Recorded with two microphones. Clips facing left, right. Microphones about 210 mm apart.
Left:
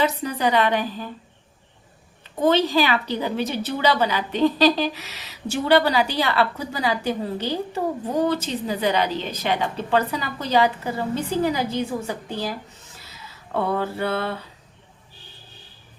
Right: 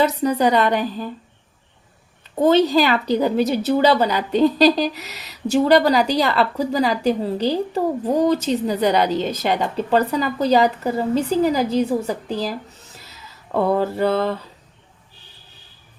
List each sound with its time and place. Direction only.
0.0 s a woman's voice: 40° right (ahead or behind)
2.4 s a woman's voice: 40° right (ahead or behind)
13.6 s a woman's voice: 40° right (ahead or behind)